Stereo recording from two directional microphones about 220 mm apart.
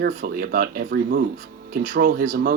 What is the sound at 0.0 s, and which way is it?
Speech, 40° right (ahead or behind).